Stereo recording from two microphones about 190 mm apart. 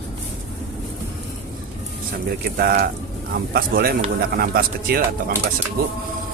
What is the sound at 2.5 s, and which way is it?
A man's voice, 55° right (ahead or behind).